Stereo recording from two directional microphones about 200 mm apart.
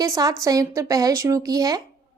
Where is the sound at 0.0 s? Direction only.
20° right (ahead or behind).